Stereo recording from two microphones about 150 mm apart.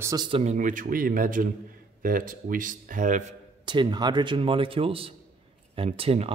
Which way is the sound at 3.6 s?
30° right (ahead or behind).